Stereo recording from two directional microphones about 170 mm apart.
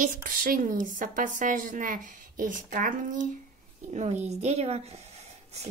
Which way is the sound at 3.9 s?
40° right (ahead or behind).